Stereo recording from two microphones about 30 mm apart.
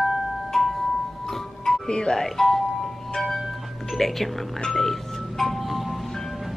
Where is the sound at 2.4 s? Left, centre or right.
Centre.